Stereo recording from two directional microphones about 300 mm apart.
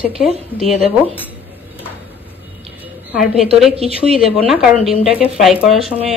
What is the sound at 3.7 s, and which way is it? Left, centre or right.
Speech, centre.